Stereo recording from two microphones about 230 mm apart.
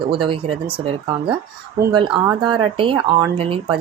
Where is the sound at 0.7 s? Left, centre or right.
Right.